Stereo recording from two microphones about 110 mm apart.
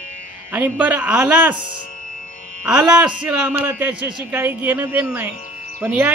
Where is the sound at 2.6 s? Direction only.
10° right (ahead or behind).